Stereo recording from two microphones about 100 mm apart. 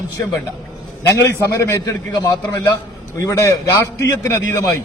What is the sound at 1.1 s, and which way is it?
A man's voice, 30° left (ahead or behind).